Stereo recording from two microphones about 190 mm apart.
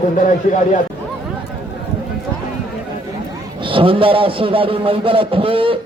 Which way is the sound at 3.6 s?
25° right (ahead or behind).